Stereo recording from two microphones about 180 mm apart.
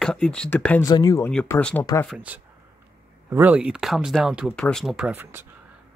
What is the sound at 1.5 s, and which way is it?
Speech, 5° left (ahead or behind).